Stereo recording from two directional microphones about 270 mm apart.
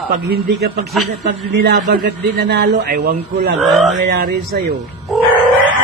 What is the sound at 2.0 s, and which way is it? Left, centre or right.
A man's voice, right.